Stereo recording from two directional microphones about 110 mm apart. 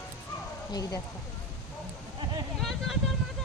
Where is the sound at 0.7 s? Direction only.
35° left (ahead or behind).